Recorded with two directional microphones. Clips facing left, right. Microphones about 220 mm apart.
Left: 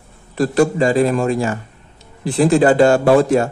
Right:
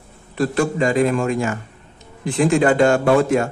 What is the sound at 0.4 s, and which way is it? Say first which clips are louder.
Speech: left 4 dB; 35° left (ahead or behind).